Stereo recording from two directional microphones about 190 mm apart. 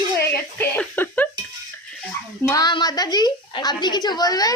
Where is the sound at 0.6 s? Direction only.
10° left (ahead or behind).